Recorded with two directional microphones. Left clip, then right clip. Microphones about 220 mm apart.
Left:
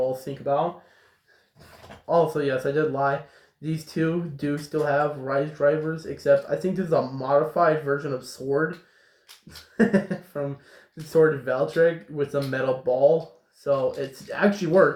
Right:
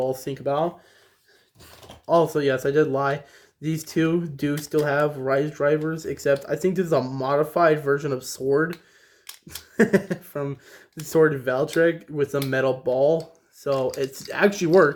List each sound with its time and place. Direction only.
0.1 s speech: 40° right (ahead or behind)
2.0 s speech: 35° right (ahead or behind)
9.7 s speech: 35° right (ahead or behind)